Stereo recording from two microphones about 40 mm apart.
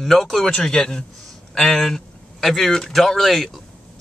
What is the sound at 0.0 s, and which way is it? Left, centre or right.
Speech, centre.